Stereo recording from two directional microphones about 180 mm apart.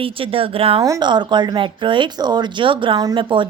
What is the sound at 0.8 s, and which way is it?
A woman's voice, 20° right (ahead or behind).